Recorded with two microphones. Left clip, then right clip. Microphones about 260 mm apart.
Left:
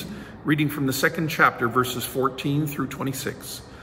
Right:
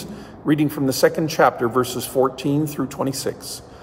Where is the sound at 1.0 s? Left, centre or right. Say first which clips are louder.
Right 4 dB; centre.